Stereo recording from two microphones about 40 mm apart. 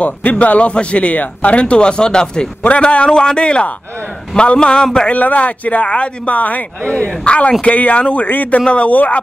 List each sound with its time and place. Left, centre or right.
0.0 s speech: left
2.7 s a man's voice: left
5.1 s a man's voice: left